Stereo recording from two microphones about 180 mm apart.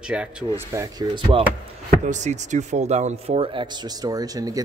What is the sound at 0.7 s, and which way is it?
Speech, 20° right (ahead or behind).